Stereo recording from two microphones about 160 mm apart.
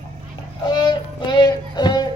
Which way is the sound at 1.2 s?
25° left (ahead or behind).